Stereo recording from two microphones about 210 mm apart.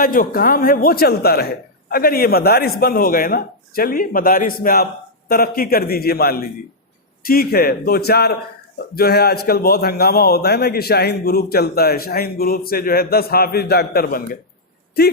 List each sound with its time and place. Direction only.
0.0 s a man's voice: 40° left (ahead or behind)